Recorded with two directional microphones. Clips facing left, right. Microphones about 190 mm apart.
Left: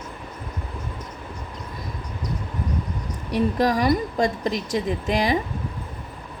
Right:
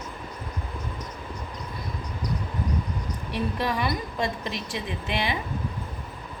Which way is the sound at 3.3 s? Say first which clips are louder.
Left 7 dB; 40° left (ahead or behind).